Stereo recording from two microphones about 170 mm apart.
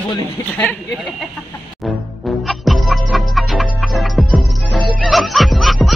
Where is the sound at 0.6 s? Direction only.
5° left (ahead or behind).